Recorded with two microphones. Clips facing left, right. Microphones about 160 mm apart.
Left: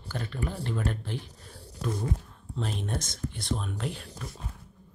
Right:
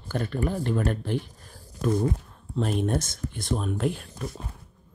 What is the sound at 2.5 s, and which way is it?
Speech, 50° right (ahead or behind).